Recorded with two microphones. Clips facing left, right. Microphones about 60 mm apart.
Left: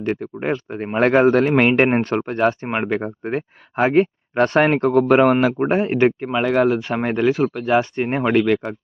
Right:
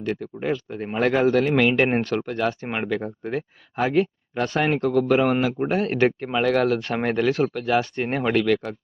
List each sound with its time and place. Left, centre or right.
0.0 s speech: left
5.8 s speech: centre